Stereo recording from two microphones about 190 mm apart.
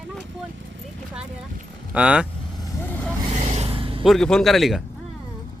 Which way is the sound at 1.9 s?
5° right (ahead or behind).